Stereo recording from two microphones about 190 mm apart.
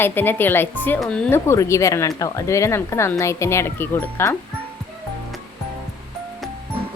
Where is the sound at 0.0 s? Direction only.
10° left (ahead or behind).